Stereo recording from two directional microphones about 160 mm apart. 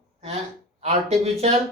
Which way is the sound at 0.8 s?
40° right (ahead or behind).